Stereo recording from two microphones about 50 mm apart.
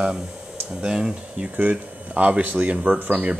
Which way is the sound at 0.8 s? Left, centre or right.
Centre.